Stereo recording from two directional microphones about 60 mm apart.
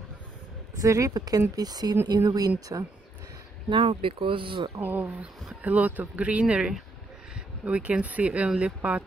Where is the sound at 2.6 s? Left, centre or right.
Right.